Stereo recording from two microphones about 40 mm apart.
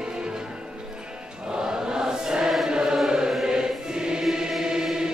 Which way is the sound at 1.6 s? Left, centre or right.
Centre.